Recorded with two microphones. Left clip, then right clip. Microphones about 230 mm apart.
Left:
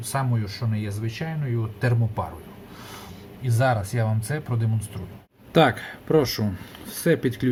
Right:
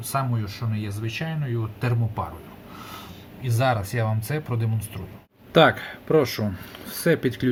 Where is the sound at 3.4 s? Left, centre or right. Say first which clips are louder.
Even; centre.